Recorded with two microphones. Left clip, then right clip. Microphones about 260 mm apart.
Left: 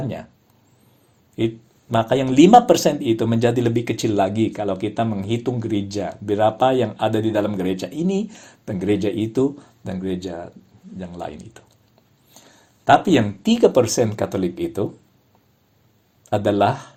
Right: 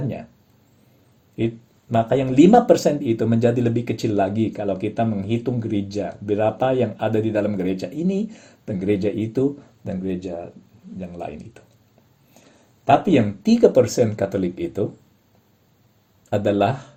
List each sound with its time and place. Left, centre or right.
1.9 s speech: centre
12.9 s speech: centre
16.3 s speech: centre